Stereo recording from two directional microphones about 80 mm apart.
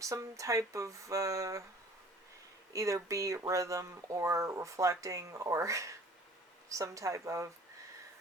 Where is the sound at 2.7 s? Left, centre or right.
Right.